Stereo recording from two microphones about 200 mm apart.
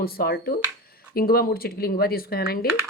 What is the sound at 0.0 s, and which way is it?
Speech, 50° left (ahead or behind).